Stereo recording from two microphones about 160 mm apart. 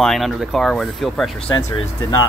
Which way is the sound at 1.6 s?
20° left (ahead or behind).